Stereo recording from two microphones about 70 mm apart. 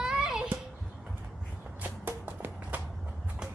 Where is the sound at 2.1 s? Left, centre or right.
Right.